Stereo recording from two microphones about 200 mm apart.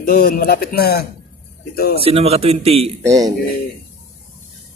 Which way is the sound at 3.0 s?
15° right (ahead or behind).